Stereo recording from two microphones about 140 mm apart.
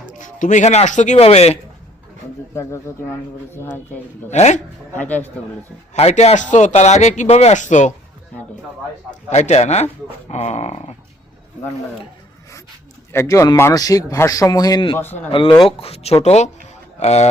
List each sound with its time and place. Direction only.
0.1 s speech: 65° left (ahead or behind); by 1.5 s 50° left (ahead or behind)
2.6 s speech: 20° left (ahead or behind)
4.3 s speech: 55° left (ahead or behind)
4.9 s speech: 10° left (ahead or behind)
5.9 s speech: 50° left (ahead or behind)
9.3 s speech: 50° left (ahead or behind)
13.1 s speech: 20° left (ahead or behind)
14.9 s speech: 15° left (ahead or behind)
15.3 s a man's voice: 40° left (ahead or behind)